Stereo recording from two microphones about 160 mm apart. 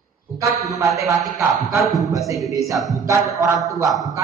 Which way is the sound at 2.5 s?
20° right (ahead or behind).